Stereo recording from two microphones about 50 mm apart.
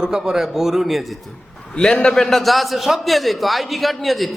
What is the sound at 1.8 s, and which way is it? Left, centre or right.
Speech, centre.